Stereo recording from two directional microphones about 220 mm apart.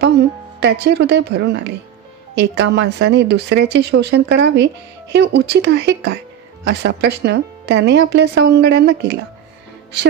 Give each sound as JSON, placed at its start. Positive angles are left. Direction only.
{"t": 0.0, "sound": "a woman's voice", "side_deg": -50}